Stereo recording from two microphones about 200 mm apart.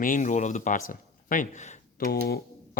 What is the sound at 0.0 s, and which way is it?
Speech, 40° left (ahead or behind).